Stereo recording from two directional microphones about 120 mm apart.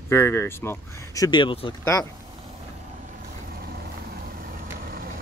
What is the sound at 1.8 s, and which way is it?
Speech, 25° left (ahead or behind).